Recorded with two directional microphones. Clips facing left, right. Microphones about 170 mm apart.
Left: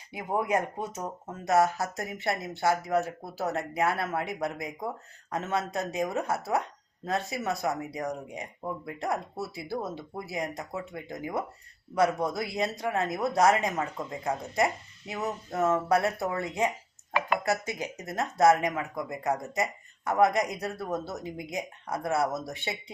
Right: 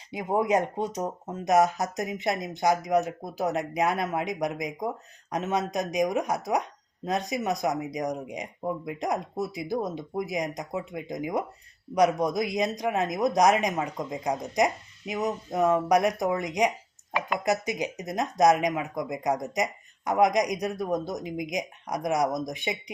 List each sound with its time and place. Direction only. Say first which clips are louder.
0.1 s a woman's voice: right 4 dB; 20° right (ahead or behind)